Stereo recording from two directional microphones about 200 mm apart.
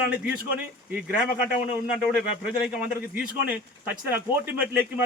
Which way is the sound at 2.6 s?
5° right (ahead or behind).